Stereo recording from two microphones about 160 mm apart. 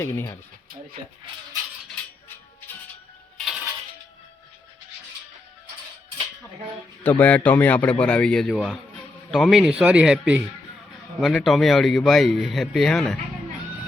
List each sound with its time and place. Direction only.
0.0 s a man's voice: 15° left (ahead or behind)
3.3 s coin: centre (ahead or behind)
7.0 s a man's voice: 10° left (ahead or behind)